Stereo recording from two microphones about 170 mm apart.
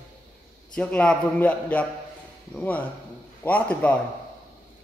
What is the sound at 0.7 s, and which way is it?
Speech, 5° left (ahead or behind).